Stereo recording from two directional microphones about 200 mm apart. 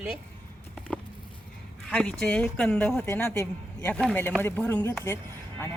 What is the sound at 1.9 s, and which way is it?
A woman's voice, 5° left (ahead or behind).